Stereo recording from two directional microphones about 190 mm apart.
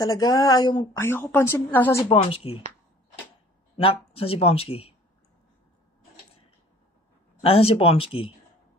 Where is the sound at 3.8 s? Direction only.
30° left (ahead or behind).